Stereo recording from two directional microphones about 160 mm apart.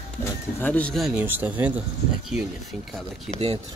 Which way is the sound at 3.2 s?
40° right (ahead or behind).